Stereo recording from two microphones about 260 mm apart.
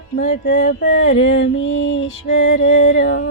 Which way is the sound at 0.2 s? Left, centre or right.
Left.